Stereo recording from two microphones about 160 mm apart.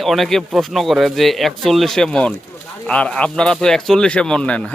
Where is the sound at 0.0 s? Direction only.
Centre (ahead or behind).